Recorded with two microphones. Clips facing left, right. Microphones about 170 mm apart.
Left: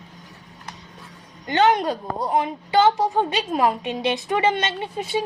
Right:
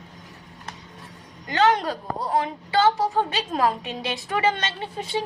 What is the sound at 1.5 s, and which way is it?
A woman's voice, 25° left (ahead or behind).